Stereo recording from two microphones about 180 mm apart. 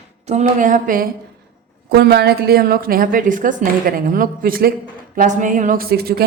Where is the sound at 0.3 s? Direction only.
40° right (ahead or behind).